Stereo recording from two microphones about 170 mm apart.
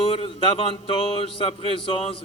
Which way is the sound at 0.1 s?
35° left (ahead or behind).